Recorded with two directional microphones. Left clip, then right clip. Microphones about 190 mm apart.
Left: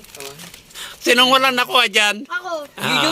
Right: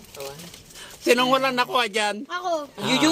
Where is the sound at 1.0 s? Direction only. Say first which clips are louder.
Left 6 dB; 10° left (ahead or behind).